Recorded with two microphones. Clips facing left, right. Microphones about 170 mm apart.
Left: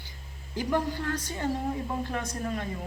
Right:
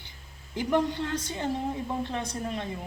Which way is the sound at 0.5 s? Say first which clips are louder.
Right 2 dB; 20° right (ahead or behind).